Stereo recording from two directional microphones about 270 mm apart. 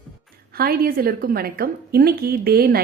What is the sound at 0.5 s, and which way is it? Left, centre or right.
A woman's voice, right.